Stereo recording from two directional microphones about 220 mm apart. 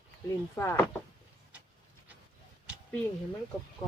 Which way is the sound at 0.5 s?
10° left (ahead or behind).